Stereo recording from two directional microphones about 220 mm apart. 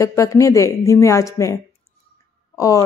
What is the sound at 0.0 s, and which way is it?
A woman's voice, 15° left (ahead or behind).